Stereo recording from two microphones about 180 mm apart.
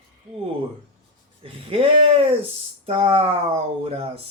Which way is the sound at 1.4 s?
30° right (ahead or behind).